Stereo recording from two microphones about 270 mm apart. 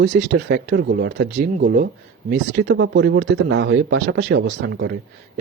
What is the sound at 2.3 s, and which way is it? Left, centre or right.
Speech, right.